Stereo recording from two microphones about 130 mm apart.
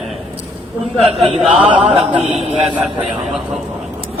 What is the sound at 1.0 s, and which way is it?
Chant, 50° right (ahead or behind).